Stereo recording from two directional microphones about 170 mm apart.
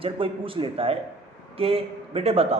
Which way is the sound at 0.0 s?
30° right (ahead or behind).